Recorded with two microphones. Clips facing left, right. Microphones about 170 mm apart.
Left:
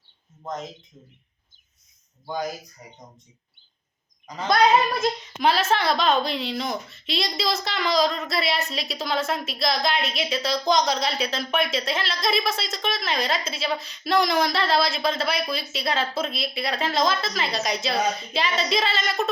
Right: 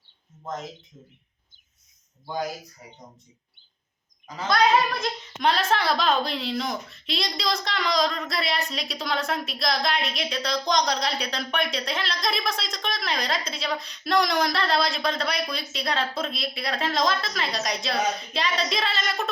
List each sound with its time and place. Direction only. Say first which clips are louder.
4.4 s speech: left 2 dB; 25° left (ahead or behind)
5.4 s speech: left 2 dB; 5° left (ahead or behind)